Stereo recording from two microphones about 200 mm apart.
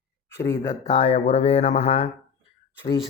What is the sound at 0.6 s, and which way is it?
Speech, 30° left (ahead or behind).